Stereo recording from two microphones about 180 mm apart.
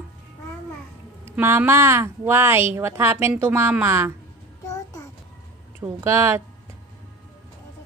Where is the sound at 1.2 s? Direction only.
15° right (ahead or behind).